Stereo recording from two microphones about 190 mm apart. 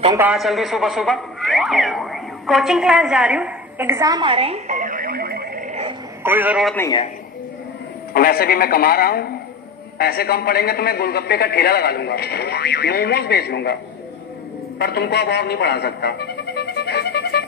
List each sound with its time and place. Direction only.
0.2 s a man's voice: 5° right (ahead or behind); by 5.8 s 50° right (ahead or behind)
6.2 s a man's voice: 10° right (ahead or behind)
8.1 s a man's voice: 50° left (ahead or behind)
14.8 s music: 55° left (ahead or behind)